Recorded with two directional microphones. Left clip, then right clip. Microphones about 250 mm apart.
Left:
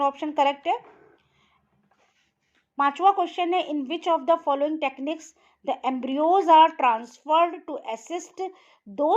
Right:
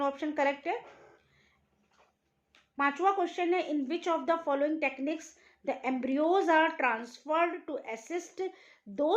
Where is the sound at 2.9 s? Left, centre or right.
Left.